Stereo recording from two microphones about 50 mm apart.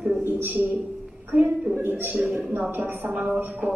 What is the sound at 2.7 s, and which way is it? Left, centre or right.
Speech, right.